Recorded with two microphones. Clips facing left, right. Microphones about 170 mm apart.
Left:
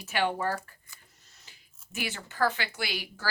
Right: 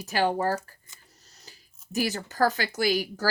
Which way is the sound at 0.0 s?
35° right (ahead or behind).